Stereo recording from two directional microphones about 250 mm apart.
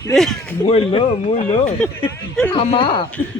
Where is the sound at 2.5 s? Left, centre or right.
Left.